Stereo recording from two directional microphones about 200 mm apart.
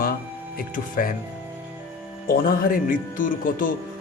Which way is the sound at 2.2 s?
45° left (ahead or behind).